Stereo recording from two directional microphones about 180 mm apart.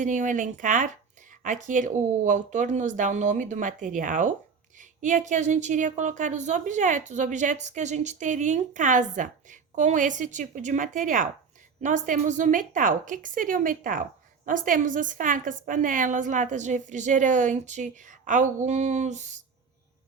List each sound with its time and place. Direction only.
0.0 s a woman's voice: 45° right (ahead or behind)